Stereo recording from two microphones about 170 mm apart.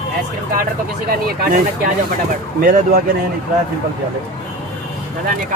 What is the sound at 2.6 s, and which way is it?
Speech, 55° right (ahead or behind).